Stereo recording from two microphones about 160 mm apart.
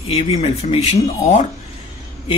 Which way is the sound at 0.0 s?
40° left (ahead or behind).